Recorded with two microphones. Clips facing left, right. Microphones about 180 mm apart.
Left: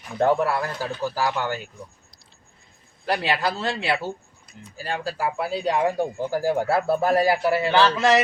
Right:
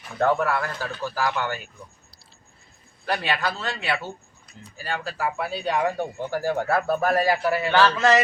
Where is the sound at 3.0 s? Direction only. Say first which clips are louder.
Left 2 dB; 35° left (ahead or behind).